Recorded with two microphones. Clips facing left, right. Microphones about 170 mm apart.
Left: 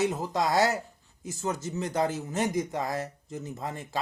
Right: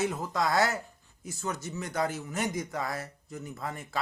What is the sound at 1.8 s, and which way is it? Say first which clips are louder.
Speech: left 3 dB; 20° left (ahead or behind).